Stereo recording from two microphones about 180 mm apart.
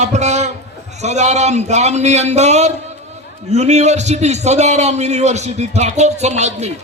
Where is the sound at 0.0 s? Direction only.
40° right (ahead or behind).